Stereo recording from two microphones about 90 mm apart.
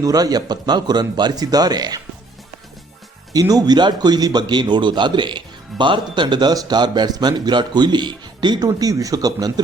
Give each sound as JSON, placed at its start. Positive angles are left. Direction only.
{"t": 0.0, "sound": "a man's voice", "side_deg": -45}
{"t": 3.5, "sound": "a man's voice", "side_deg": -50}